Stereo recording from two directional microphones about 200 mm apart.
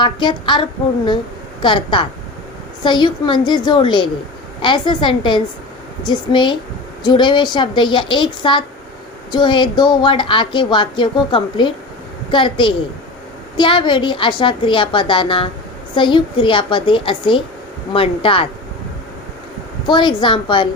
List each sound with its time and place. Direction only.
0.0 s a woman's voice: 25° left (ahead or behind)
1.6 s a woman's voice: 25° left (ahead or behind)
19.9 s a woman's voice: 25° left (ahead or behind)